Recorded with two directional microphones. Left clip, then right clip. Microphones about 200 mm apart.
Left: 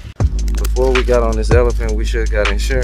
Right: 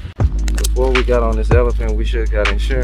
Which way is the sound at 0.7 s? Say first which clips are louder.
Left 2 dB; 20° left (ahead or behind).